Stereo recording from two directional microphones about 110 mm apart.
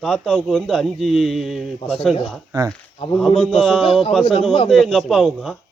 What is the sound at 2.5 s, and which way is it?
Speech, 30° right (ahead or behind).